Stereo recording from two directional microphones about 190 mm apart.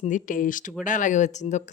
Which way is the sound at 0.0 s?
45° left (ahead or behind).